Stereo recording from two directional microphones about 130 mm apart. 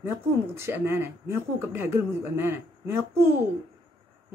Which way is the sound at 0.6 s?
15° right (ahead or behind).